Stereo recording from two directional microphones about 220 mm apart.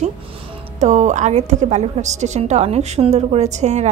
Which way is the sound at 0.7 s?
30° right (ahead or behind).